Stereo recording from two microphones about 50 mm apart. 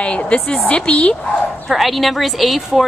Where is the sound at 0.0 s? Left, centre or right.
Left.